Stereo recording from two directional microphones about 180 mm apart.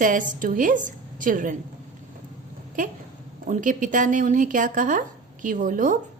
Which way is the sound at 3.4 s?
45° right (ahead or behind).